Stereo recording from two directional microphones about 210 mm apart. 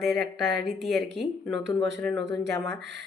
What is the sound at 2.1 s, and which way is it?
Speech, 55° right (ahead or behind).